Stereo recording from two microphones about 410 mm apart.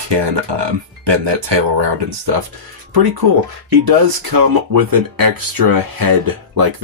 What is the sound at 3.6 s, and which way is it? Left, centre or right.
Speech, right.